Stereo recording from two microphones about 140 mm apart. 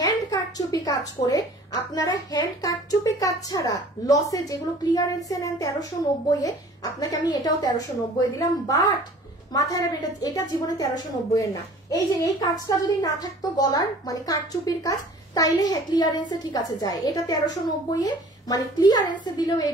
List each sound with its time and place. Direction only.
0.0 s a woman's voice: 25° left (ahead or behind)
11.9 s a woman's voice: 25° left (ahead or behind)